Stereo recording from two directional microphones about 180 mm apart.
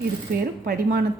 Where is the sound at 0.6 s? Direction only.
65° right (ahead or behind).